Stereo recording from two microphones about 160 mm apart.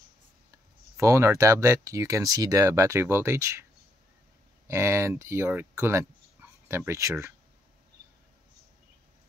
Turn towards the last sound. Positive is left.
turn(degrees=-15)  # may be behind; listen again after turning